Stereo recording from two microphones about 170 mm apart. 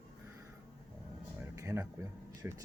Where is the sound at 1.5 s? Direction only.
20° right (ahead or behind).